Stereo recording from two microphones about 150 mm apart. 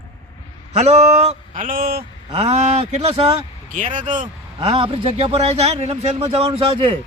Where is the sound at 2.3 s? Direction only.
40° right (ahead or behind).